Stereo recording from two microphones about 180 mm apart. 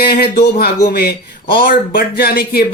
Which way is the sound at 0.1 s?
55° left (ahead or behind).